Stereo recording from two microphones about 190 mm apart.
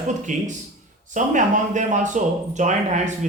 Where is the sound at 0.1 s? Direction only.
40° right (ahead or behind).